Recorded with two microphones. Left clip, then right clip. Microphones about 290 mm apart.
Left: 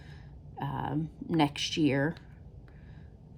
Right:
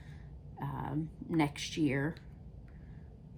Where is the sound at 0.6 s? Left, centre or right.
Left.